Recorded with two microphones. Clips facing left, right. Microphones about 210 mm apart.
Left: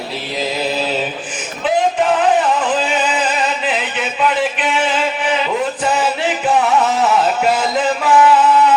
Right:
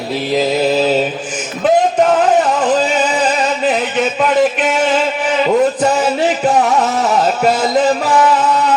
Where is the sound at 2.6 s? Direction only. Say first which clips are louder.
Right 4 dB; 40° right (ahead or behind).